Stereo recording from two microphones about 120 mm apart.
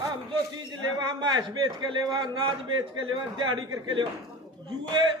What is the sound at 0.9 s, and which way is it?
A man's voice, 40° right (ahead or behind).